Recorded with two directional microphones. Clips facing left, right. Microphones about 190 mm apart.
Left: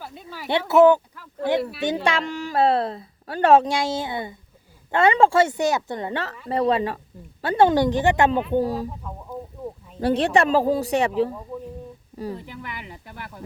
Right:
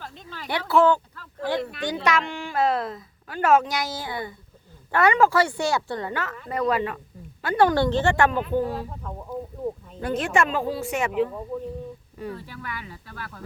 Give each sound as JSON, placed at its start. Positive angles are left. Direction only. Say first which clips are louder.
{"t": 0.0, "sound": "a sound", "louder": "left 2 dB", "side_deg": 10}
{"t": 0.6, "sound": "speech", "louder": "left 5 dB", "side_deg": 20}
{"t": 2.0, "sound": "a woman's voice", "louder": "left 1 dB", "side_deg": 35}
{"t": 8.5, "sound": "a woman's voice", "louder": "left 3 dB", "side_deg": 35}
{"t": 10.0, "sound": "a woman's voice", "louder": "left 4 dB", "side_deg": 35}
{"t": 12.3, "sound": "speech", "louder": "left 2 dB", "side_deg": 20}